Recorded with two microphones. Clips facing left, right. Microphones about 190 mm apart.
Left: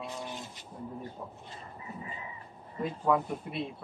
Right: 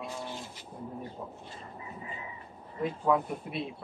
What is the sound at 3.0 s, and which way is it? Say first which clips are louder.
Speech: even; centre (ahead or behind).